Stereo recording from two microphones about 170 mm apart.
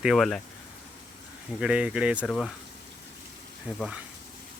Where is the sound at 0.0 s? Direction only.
Centre (ahead or behind).